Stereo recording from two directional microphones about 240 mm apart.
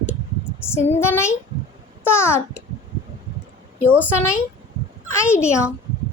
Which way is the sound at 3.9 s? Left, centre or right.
Centre.